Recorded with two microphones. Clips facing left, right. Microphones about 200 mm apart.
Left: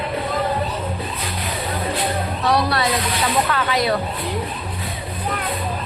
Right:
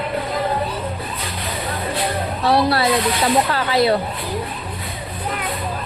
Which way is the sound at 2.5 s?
30° right (ahead or behind).